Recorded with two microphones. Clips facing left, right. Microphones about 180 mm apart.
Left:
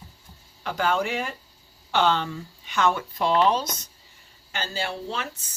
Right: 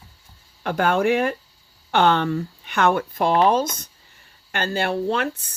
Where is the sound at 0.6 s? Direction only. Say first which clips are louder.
Right 6 dB; 55° right (ahead or behind).